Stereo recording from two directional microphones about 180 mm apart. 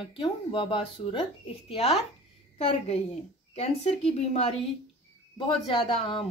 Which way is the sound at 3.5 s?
35° left (ahead or behind).